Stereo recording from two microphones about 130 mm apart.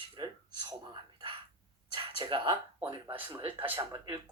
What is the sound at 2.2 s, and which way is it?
A man's voice, 35° right (ahead or behind).